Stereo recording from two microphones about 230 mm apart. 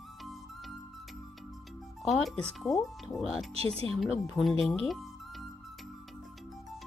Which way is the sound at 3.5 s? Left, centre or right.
Right.